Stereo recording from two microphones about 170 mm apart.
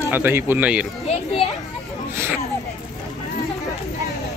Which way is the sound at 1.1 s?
35° left (ahead or behind).